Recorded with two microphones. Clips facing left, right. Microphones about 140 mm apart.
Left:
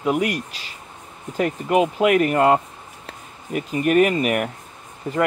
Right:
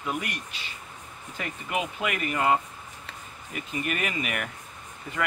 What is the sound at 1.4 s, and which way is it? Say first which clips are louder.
Speech: left 12 dB; 50° left (ahead or behind).